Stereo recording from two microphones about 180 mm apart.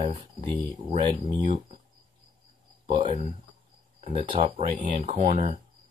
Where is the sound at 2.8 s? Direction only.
25° right (ahead or behind).